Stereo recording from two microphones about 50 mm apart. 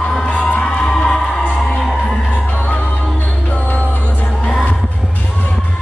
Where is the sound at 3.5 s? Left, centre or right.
Left.